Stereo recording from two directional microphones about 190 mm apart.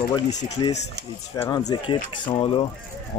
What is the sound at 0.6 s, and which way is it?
Speech, 25° left (ahead or behind).